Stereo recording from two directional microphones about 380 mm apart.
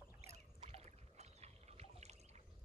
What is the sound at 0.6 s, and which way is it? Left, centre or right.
Rowboat, centre.